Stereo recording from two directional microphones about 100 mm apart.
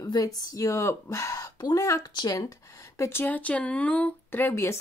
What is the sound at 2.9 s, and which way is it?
Speech, 30° left (ahead or behind).